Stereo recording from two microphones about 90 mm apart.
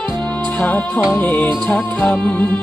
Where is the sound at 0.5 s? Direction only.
15° left (ahead or behind).